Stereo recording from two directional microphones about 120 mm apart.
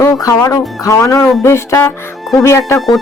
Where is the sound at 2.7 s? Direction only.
Centre (ahead or behind).